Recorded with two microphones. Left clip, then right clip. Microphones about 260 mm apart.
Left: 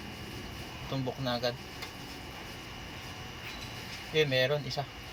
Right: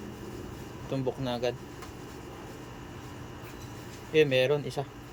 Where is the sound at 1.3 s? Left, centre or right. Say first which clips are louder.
Even; centre.